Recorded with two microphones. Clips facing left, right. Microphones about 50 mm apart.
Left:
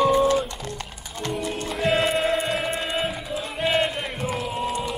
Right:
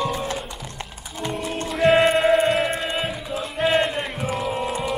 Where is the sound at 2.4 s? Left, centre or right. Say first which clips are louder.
Right 4 dB; centre.